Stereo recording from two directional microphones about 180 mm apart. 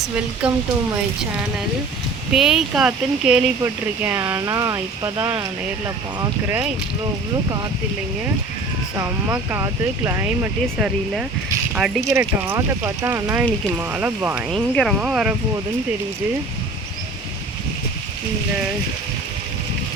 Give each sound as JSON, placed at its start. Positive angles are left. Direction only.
{"t": 0.4, "sound": "speech", "side_deg": -5}
{"t": 2.3, "sound": "speech", "side_deg": 0}
{"t": 9.0, "sound": "speech", "side_deg": -15}
{"t": 12.1, "sound": "speech", "side_deg": -15}
{"t": 14.5, "sound": "speech", "side_deg": 0}